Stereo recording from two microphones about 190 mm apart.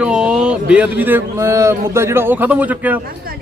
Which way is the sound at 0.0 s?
5° right (ahead or behind).